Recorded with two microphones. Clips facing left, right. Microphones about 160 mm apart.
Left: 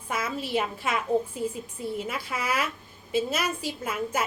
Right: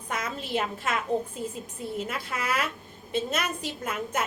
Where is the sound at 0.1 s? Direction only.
5° left (ahead or behind).